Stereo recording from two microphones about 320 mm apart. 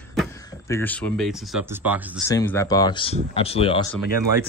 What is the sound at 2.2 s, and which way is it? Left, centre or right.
Speech, centre.